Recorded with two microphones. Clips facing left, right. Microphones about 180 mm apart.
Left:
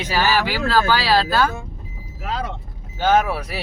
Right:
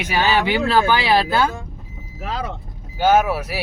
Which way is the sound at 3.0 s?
10° right (ahead or behind).